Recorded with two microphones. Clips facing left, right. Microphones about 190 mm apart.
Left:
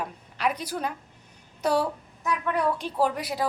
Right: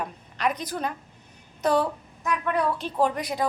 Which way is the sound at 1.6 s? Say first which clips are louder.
Right 2 dB; 10° left (ahead or behind).